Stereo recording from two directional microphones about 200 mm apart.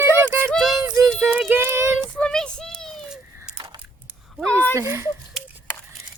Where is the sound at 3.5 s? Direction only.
20° right (ahead or behind).